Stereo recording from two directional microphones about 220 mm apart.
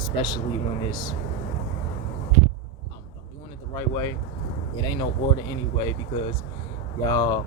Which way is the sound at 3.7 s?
20° left (ahead or behind).